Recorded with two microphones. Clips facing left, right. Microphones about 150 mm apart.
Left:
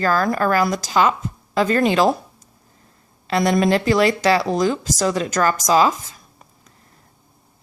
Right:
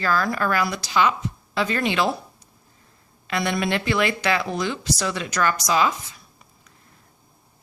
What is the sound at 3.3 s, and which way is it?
Speech, 40° left (ahead or behind).